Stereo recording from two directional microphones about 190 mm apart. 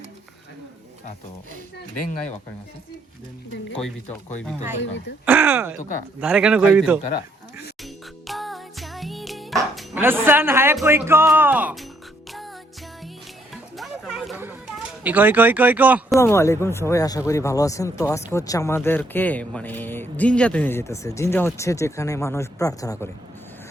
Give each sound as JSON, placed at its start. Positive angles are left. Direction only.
{"t": 3.7, "sound": "a man's voice", "side_deg": 5}
{"t": 4.8, "sound": "speech", "side_deg": 70}
{"t": 5.2, "sound": "a man's voice", "side_deg": -10}
{"t": 8.3, "sound": "music", "side_deg": 0}
{"t": 9.9, "sound": "speech", "side_deg": -10}
{"t": 13.5, "sound": "music", "side_deg": 0}
{"t": 15.0, "sound": "speech", "side_deg": -10}
{"t": 16.2, "sound": "speech", "side_deg": 15}